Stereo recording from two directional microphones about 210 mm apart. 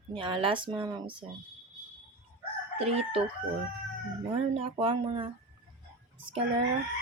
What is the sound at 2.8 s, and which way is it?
Chicken, 30° right (ahead or behind).